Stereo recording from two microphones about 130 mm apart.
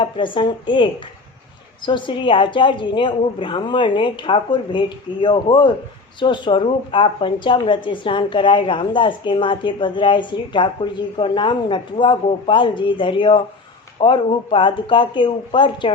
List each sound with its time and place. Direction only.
0.0 s speech: 40° left (ahead or behind)